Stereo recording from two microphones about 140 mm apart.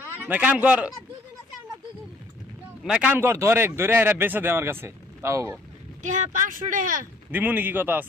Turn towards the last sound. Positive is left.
turn(degrees=-15)  # may be behind; listen again after turning